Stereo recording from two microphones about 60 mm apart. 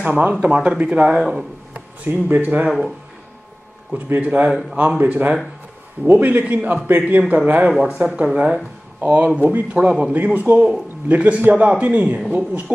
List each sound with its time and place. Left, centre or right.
0.0 s a man's voice: right
1.1 s speech: centre
1.7 s speech: right
4.2 s a man's voice: right
7.7 s speech: centre
8.2 s a man's voice: right